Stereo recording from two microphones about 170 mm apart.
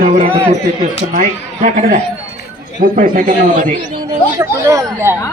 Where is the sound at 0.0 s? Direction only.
50° right (ahead or behind).